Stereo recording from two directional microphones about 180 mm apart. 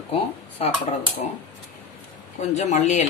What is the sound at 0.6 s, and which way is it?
Speech, 35° left (ahead or behind).